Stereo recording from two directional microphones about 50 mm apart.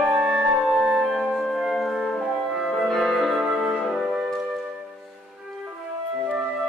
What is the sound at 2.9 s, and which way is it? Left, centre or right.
Music, centre.